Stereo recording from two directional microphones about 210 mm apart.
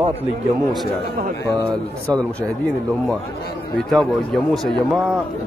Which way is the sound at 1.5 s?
15° right (ahead or behind).